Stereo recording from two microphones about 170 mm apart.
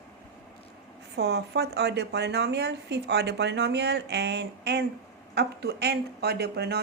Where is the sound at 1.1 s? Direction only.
75° right (ahead or behind).